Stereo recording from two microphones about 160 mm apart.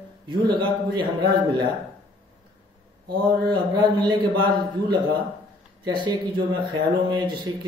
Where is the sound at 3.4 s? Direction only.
25° right (ahead or behind).